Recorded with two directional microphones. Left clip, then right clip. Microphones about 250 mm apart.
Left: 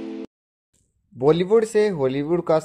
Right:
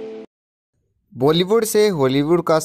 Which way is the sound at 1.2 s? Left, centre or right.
Right.